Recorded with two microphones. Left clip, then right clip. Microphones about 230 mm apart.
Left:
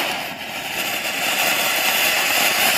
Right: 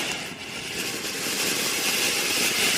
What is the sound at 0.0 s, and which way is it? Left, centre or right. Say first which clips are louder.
Vehicle: left 6 dB; centre.